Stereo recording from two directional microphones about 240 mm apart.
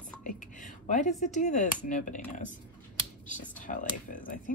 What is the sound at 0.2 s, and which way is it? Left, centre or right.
Speech, left.